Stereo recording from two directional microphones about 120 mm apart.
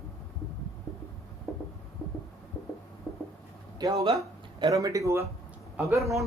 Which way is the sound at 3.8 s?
30° right (ahead or behind).